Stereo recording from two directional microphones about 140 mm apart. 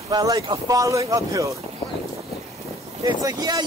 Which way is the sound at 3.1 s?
30° right (ahead or behind).